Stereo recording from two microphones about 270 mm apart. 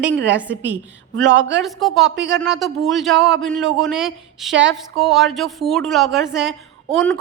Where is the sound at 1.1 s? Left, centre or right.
Right.